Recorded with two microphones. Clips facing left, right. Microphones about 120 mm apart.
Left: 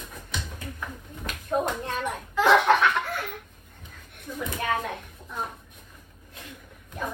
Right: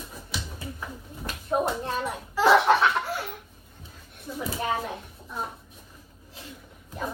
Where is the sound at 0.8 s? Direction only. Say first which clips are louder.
Even; 25° right (ahead or behind).